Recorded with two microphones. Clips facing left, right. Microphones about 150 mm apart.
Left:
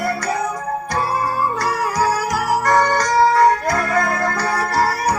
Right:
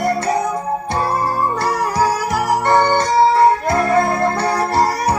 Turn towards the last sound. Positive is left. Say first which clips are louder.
# right 2 dB
turn(degrees=-25)  # may be behind; listen again after turning